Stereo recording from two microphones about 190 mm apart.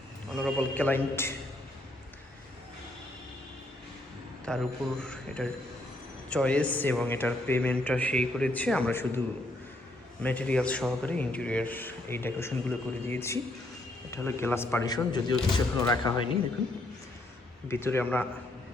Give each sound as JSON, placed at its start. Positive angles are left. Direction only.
{"t": 0.3, "sound": "a man's voice", "side_deg": 5}
{"t": 4.4, "sound": "a man's voice", "side_deg": 5}
{"t": 10.2, "sound": "a man's voice", "side_deg": 5}
{"t": 17.7, "sound": "a man's voice", "side_deg": 10}